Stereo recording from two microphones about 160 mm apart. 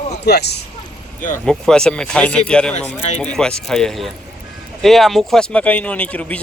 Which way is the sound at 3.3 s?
5° left (ahead or behind).